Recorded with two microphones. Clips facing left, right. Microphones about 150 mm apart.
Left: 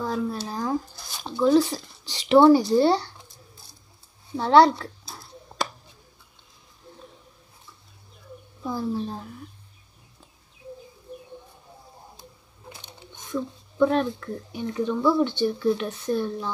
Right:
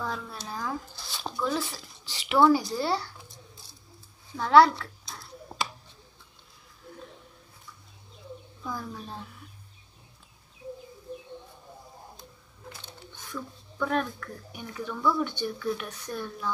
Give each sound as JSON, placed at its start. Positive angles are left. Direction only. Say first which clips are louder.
{"t": 0.0, "sound": "speech", "louder": "left 8 dB", "side_deg": 35}
{"t": 4.4, "sound": "speech", "louder": "left 2 dB", "side_deg": 30}
{"t": 8.6, "sound": "speech", "louder": "left 9 dB", "side_deg": 30}
{"t": 12.6, "sound": "speech", "louder": "left 1 dB", "side_deg": 20}